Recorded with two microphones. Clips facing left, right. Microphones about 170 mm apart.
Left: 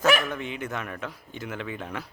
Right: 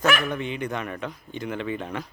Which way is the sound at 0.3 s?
5° left (ahead or behind).